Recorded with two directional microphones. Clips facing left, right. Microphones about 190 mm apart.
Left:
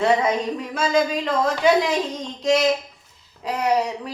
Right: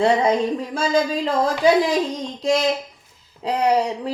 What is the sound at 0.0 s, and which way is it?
Speech, 30° right (ahead or behind).